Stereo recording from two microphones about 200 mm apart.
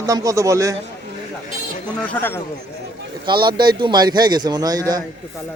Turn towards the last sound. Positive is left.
turn(degrees=-20)  # may be behind; listen again after turning